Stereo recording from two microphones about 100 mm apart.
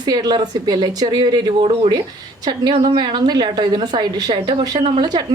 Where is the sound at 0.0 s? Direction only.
45° right (ahead or behind); by 1.9 s 65° right (ahead or behind).